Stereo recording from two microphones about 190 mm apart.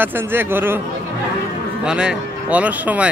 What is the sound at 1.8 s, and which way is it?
Speech, 5° right (ahead or behind).